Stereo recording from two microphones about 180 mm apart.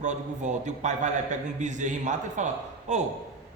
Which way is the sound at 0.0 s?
40° right (ahead or behind).